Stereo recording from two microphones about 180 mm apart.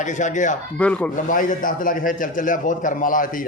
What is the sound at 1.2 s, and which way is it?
A man's voice, 50° left (ahead or behind).